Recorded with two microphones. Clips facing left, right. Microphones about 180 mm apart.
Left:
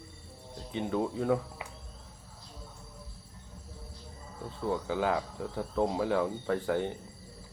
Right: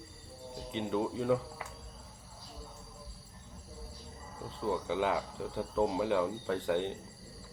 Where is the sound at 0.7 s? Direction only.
20° right (ahead or behind).